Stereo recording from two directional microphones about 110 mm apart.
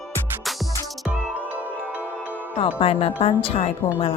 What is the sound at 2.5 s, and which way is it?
Speech, 65° left (ahead or behind).